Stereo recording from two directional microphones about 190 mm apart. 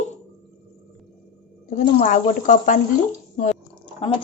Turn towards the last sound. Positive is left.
turn(degrees=30)  # may be behind; listen again after turning